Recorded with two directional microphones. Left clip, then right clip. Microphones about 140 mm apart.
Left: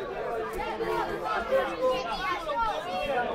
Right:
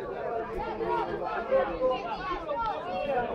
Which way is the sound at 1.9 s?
30° right (ahead or behind).